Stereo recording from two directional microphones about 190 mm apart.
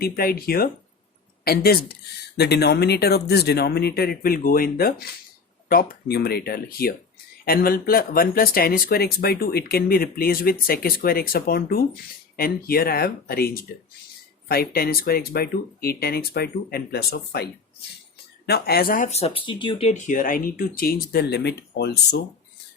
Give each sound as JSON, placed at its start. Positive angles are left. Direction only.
{"t": 0.0, "sound": "speech", "side_deg": 50}
{"t": 19.9, "sound": "speech", "side_deg": 45}